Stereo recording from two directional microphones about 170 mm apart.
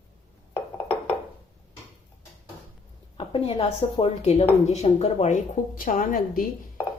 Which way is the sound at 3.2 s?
35° left (ahead or behind).